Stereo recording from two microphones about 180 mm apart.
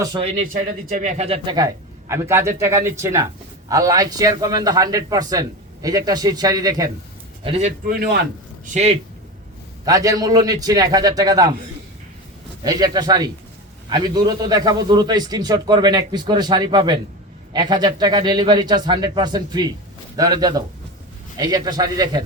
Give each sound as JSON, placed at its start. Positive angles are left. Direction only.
{"t": 0.2, "sound": "speech", "side_deg": -35}
{"t": 0.4, "sound": "speech", "side_deg": -50}
{"t": 1.5, "sound": "a man's voice", "side_deg": -15}
{"t": 7.4, "sound": "speech", "side_deg": -35}
{"t": 7.9, "sound": "a man's voice", "side_deg": -60}
{"t": 8.6, "sound": "speech", "side_deg": -40}
{"t": 9.8, "sound": "a man's voice", "side_deg": -20}
{"t": 12.6, "sound": "a man's voice", "side_deg": -20}